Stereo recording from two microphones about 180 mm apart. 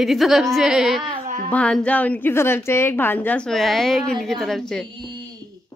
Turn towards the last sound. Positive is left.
turn(degrees=5)  # may be behind; listen again after turning